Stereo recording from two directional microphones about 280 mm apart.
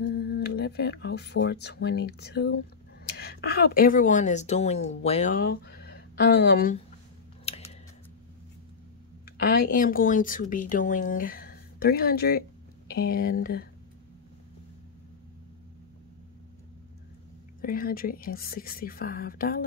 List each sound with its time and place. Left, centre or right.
0.0 s speech: left
7.4 s scissors: left
9.4 s speech: left
17.6 s speech: left